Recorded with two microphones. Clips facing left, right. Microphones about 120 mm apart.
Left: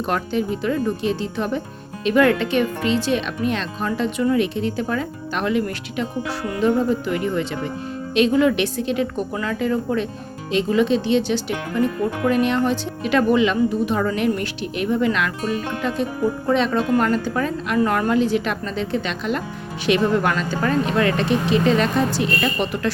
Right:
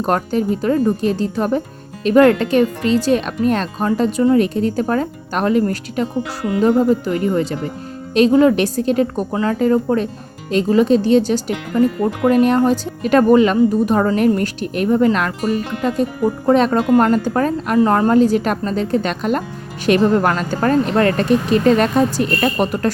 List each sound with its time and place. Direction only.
0.0 s speech: 40° right (ahead or behind)
17.7 s speech: 30° right (ahead or behind); by 22.9 s 45° right (ahead or behind)